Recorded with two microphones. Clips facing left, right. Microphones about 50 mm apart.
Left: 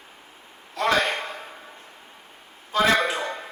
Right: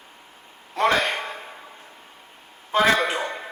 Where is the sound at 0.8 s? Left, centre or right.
Right.